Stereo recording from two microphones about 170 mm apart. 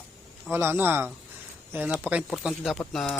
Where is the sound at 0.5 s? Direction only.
15° right (ahead or behind).